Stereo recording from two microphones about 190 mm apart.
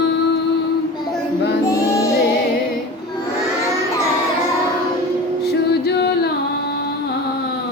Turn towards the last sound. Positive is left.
turn(degrees=60)  # may be behind; listen again after turning